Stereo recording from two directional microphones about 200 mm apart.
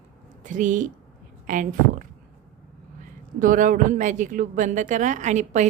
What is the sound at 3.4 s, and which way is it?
A woman's voice, 40° right (ahead or behind).